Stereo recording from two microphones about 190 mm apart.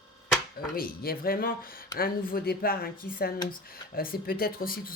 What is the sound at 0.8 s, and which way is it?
Speech, 50° left (ahead or behind).